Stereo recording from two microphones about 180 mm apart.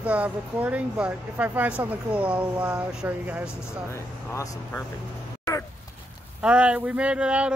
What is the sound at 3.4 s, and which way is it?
Speech, 15° left (ahead or behind).